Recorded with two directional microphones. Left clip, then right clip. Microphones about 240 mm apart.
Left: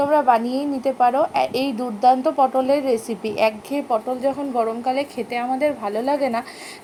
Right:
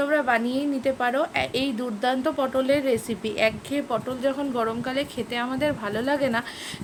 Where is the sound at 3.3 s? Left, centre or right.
Right.